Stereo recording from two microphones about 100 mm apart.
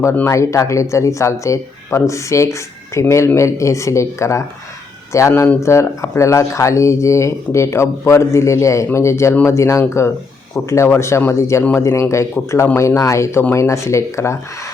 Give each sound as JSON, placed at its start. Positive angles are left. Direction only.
{"t": 0.0, "sound": "speech", "side_deg": 25}